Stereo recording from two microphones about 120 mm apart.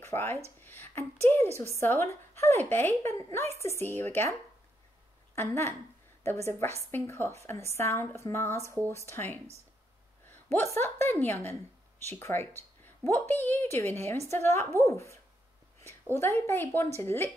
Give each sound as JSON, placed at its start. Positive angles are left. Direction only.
{"t": 0.0, "sound": "a woman's voice", "side_deg": 20}
{"t": 10.5, "sound": "a woman's voice", "side_deg": 20}